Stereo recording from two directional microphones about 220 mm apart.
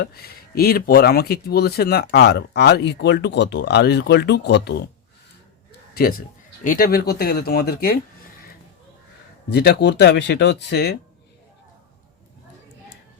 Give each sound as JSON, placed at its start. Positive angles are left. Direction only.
{"t": 0.0, "sound": "speech", "side_deg": 45}
{"t": 5.9, "sound": "a man's voice", "side_deg": 40}
{"t": 9.5, "sound": "speech", "side_deg": 45}